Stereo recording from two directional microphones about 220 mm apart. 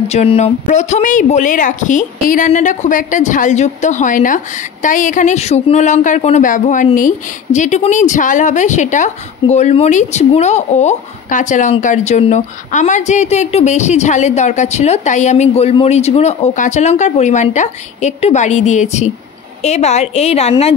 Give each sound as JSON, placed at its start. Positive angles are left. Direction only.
{"t": 0.1, "sound": "a woman's voice", "side_deg": 30}